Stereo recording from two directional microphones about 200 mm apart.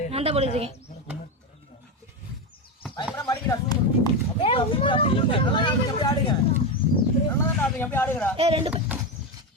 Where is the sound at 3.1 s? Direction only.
15° left (ahead or behind).